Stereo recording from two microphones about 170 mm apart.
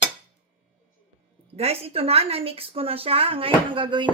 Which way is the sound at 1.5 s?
35° right (ahead or behind).